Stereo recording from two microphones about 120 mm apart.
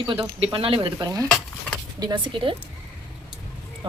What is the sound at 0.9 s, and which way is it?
Stir, 30° right (ahead or behind).